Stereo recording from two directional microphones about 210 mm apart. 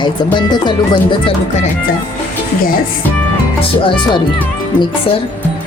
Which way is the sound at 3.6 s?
25° left (ahead or behind).